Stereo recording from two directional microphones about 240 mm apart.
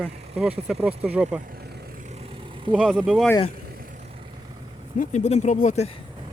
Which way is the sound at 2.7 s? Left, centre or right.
Centre.